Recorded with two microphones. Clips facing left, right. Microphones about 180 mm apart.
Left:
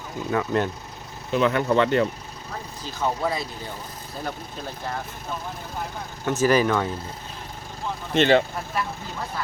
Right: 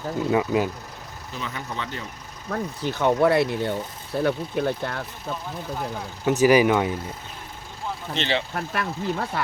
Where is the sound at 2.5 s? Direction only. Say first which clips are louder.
Right 9 dB; 65° right (ahead or behind).